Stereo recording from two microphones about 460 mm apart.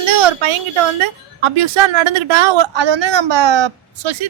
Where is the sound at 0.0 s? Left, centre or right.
Right.